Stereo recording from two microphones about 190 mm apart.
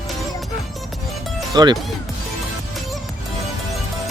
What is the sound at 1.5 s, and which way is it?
Speech, 20° right (ahead or behind).